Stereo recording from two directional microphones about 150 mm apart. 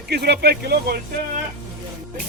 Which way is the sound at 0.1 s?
90° right.